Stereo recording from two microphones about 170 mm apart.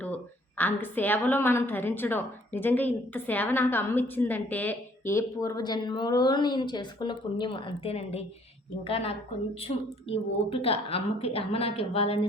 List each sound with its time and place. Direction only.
0.0 s a woman's voice: 10° left (ahead or behind); by 12.2 s 35° left (ahead or behind)